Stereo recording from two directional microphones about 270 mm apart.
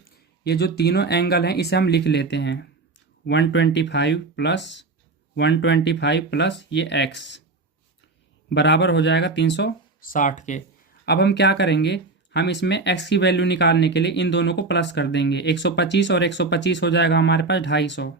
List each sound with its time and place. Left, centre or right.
0.0 s speech: left
8.4 s speech: left
11.0 s speech: left